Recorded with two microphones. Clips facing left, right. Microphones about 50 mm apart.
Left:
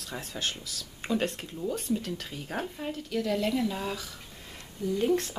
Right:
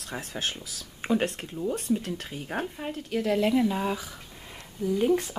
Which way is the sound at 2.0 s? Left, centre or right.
Right.